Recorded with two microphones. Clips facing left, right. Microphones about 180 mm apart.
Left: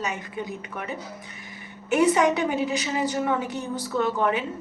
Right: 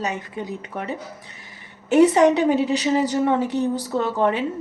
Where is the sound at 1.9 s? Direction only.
35° right (ahead or behind).